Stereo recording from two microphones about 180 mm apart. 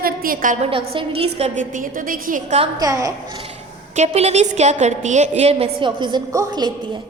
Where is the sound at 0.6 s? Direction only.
30° right (ahead or behind).